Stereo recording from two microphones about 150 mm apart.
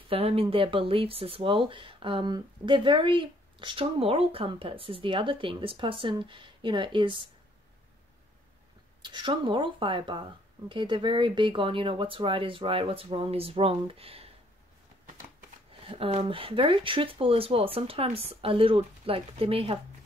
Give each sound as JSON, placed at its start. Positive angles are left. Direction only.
{"t": 0.1, "sound": "speech", "side_deg": -40}
{"t": 9.0, "sound": "speech", "side_deg": -30}
{"t": 15.8, "sound": "speech", "side_deg": -40}